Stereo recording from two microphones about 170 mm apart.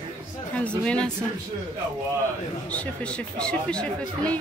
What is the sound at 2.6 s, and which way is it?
Speech, 5° left (ahead or behind).